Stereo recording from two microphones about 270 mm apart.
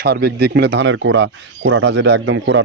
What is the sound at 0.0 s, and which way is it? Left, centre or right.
Speech, right.